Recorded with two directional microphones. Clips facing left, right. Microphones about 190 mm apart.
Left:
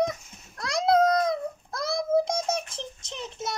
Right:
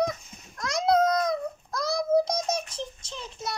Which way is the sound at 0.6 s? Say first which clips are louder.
Left 1 dB; 30° left (ahead or behind).